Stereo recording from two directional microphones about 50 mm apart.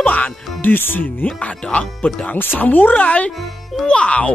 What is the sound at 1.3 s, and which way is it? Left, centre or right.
Speech, left.